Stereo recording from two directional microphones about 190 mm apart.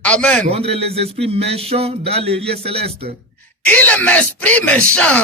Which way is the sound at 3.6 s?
10° left (ahead or behind).